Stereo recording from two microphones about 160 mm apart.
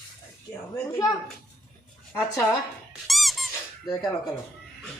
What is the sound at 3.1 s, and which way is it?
Squeak, centre (ahead or behind).